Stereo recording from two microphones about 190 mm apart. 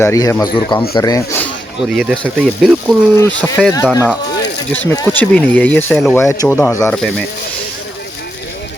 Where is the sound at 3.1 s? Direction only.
10° left (ahead or behind).